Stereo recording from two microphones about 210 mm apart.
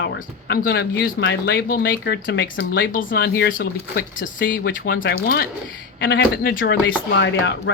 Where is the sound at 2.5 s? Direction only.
45° left (ahead or behind); by 7.7 s 60° left (ahead or behind).